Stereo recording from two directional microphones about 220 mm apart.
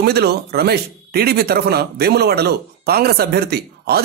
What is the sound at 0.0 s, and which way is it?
A man's voice, 45° right (ahead or behind).